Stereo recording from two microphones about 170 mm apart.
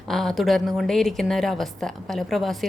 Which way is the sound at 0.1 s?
Centre (ahead or behind).